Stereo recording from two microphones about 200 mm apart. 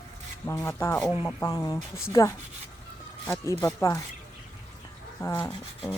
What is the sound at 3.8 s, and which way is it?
Speech, 15° left (ahead or behind).